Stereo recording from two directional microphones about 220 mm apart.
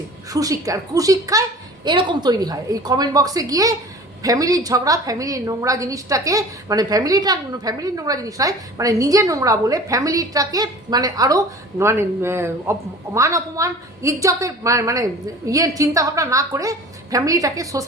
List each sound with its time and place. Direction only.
0.3 s a woman's voice: 15° right (ahead or behind)